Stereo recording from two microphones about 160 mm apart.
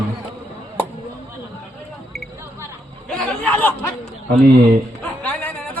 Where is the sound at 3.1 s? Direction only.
5° left (ahead or behind).